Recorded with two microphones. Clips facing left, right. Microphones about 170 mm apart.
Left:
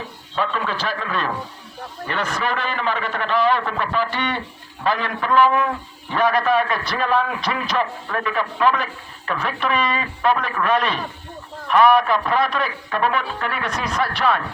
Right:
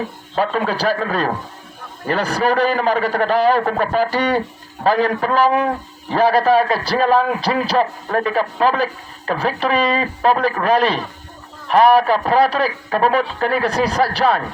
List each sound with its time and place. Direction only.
0.3 s a man's voice: 45° right (ahead or behind)